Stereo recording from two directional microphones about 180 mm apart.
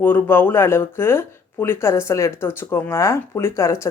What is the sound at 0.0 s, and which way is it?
Speech, 10° left (ahead or behind).